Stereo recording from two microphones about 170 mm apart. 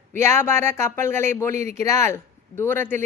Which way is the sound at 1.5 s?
45° right (ahead or behind).